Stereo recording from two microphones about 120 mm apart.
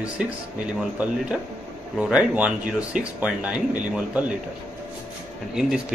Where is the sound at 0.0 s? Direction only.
10° right (ahead or behind).